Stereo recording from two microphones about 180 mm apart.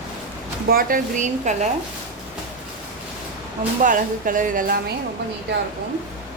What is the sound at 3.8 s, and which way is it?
Speech, 50° right (ahead or behind).